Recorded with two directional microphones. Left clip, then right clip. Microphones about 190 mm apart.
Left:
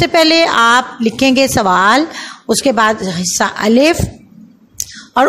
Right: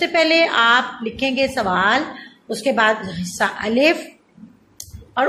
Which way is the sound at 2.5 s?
55° left (ahead or behind).